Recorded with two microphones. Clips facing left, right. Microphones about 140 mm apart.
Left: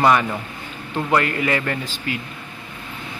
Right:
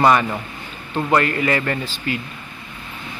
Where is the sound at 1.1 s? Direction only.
10° left (ahead or behind).